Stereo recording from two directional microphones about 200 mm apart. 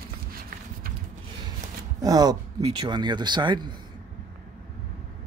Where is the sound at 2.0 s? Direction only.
20° right (ahead or behind).